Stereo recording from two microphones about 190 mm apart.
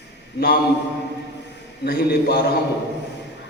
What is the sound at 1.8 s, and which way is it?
Speech, 55° left (ahead or behind).